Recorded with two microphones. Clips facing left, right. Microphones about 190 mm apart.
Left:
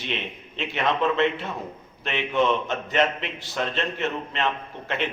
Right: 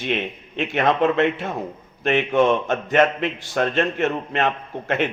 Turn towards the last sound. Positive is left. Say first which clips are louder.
# right 6 dB
turn(degrees=-50)  # may be behind; listen again after turning